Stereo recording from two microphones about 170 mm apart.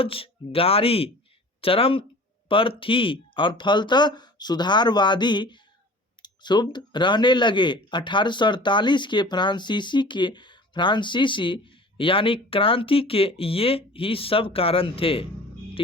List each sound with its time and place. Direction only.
0.0 s speech: 35° left (ahead or behind)